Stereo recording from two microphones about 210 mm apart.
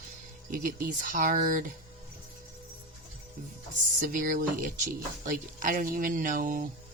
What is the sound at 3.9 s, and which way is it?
Speech, 40° right (ahead or behind).